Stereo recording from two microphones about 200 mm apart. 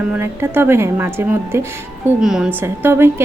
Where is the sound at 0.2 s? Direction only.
10° right (ahead or behind).